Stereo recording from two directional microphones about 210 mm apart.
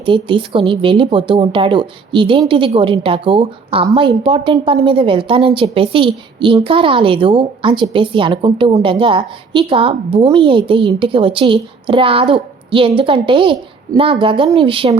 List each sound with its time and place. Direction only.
0.0 s a woman's voice: 25° right (ahead or behind)